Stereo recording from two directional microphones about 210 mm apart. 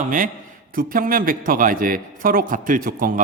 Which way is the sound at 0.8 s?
40° right (ahead or behind).